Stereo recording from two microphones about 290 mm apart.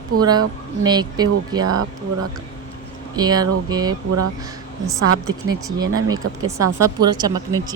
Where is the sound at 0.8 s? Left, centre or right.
Centre.